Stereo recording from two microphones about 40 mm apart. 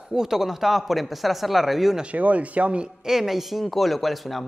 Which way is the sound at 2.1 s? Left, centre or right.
Right.